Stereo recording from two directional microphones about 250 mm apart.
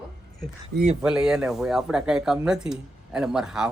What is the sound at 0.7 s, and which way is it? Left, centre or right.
Speech, right.